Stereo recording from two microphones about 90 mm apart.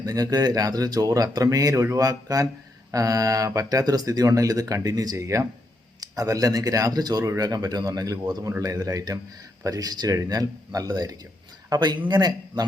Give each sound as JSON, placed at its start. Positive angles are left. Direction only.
{"t": 0.0, "sound": "speech", "side_deg": -45}